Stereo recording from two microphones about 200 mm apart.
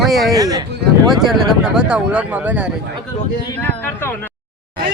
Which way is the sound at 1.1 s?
Centre (ahead or behind).